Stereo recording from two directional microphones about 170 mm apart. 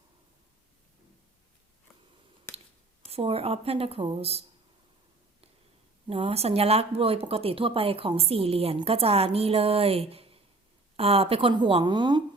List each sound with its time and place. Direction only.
2.5 s scissors: 15° left (ahead or behind)
3.1 s speech: 35° right (ahead or behind)
6.1 s speech: 35° right (ahead or behind)